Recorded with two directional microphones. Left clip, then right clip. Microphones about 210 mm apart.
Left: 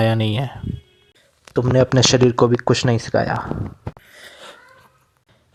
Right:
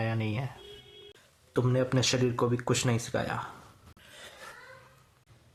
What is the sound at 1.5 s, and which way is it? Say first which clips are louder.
Speech: left 12 dB; 40° left (ahead or behind).